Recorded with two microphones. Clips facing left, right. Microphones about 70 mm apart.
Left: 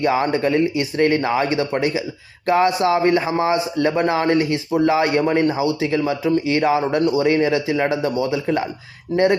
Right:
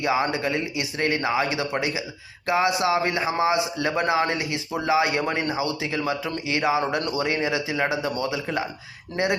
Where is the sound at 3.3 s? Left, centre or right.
Centre.